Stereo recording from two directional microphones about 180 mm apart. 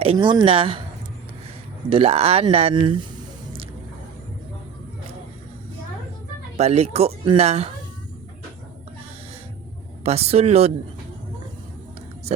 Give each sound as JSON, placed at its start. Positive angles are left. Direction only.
{"t": 0.0, "sound": "speech", "side_deg": -30}
{"t": 1.9, "sound": "speech", "side_deg": -35}
{"t": 6.6, "sound": "speech", "side_deg": -35}
{"t": 10.0, "sound": "speech", "side_deg": -35}